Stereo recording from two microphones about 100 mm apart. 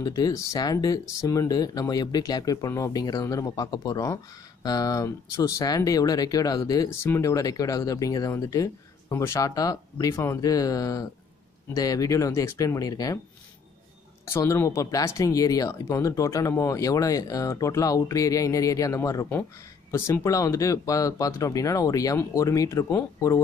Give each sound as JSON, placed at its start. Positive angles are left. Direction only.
{"t": 0.0, "sound": "speech", "side_deg": 40}
{"t": 14.3, "sound": "speech", "side_deg": 30}